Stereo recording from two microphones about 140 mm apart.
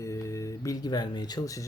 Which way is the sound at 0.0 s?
20° left (ahead or behind).